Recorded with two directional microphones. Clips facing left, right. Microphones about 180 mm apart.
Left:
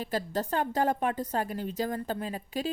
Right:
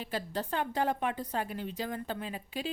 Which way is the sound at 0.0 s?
40° left (ahead or behind).